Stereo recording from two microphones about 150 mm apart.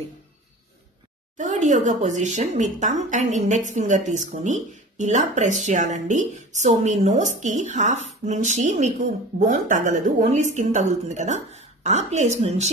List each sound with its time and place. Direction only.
1.4 s a woman's voice: 55° right (ahead or behind)